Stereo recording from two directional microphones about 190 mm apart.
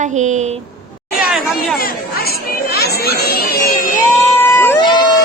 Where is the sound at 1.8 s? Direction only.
55° left (ahead or behind).